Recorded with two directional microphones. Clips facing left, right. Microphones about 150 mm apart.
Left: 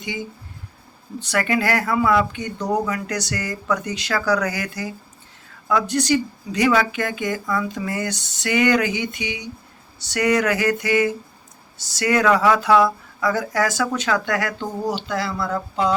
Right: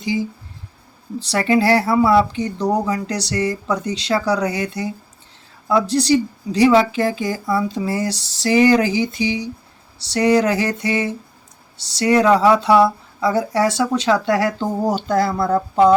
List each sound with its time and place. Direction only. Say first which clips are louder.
0.0 s speech: right 8 dB; 30° right (ahead or behind)
1.3 s speech: right 5 dB; 30° right (ahead or behind)
14.8 s speech: right 6 dB; 45° right (ahead or behind)